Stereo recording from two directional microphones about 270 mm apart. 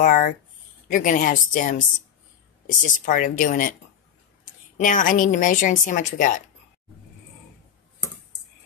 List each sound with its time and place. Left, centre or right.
0.0 s a woman's voice: left
4.7 s a woman's voice: left